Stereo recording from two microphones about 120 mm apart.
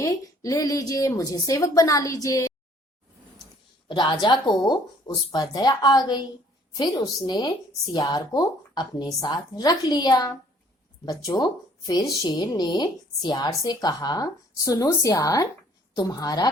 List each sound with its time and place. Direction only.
0.0 s a woman's voice: 30° left (ahead or behind)
3.8 s a woman's voice: 40° left (ahead or behind)